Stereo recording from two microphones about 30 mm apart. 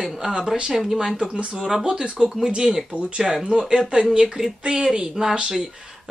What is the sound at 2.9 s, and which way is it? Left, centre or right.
Speech, right.